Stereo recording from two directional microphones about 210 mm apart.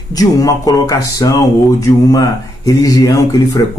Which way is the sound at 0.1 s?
15° left (ahead or behind).